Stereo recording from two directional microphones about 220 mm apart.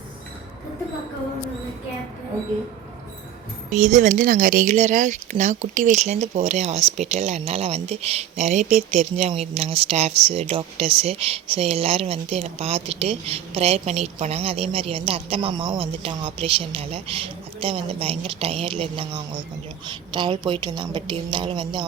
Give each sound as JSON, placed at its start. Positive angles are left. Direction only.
{"t": 3.7, "sound": "speech", "side_deg": -35}